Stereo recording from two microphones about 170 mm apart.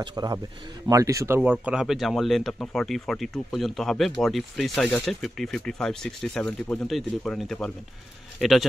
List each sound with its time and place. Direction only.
0.0 s a man's voice: 25° right (ahead or behind); by 8.6 s centre (ahead or behind)